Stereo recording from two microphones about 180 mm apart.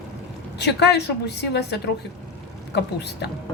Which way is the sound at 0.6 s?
70° left (ahead or behind).